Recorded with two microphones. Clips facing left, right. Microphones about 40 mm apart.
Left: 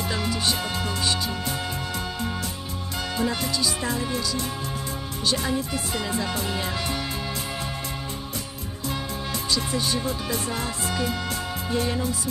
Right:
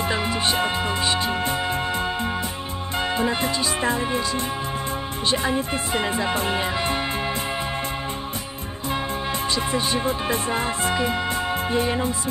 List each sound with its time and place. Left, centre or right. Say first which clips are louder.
0.1 s music: right 1 dB; right
3.2 s music: even; right
5.3 s speech: right 3 dB; right
9.6 s music: right 3 dB; right